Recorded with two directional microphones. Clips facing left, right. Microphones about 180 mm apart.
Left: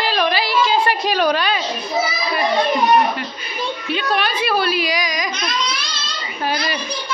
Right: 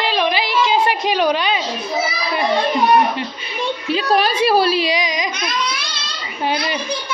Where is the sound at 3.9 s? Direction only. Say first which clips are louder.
Right 4 dB; 35° right (ahead or behind).